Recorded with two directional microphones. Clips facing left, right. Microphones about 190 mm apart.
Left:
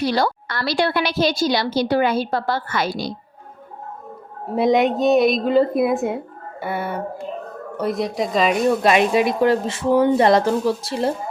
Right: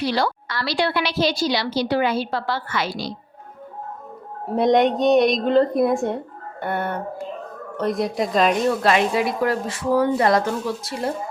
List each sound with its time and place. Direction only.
0.0 s a woman's voice: 45° left (ahead or behind)
4.4 s a woman's voice: 5° left (ahead or behind)
8.8 s speech: 15° left (ahead or behind)